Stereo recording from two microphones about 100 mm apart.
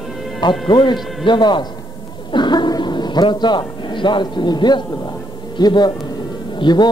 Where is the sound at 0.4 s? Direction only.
55° left (ahead or behind).